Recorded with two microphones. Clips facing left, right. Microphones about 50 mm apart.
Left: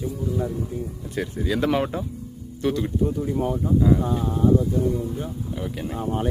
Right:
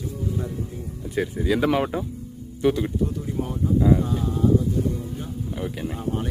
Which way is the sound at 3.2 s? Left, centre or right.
Centre.